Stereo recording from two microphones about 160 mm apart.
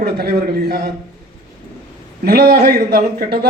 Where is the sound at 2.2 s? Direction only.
70° right (ahead or behind).